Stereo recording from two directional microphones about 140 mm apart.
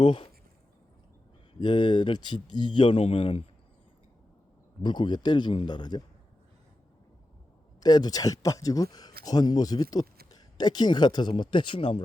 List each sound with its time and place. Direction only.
0.0 s a man's voice: 40° left (ahead or behind)
1.5 s a man's voice: 35° left (ahead or behind)
4.8 s a man's voice: 35° left (ahead or behind)
7.8 s a man's voice: 30° left (ahead or behind)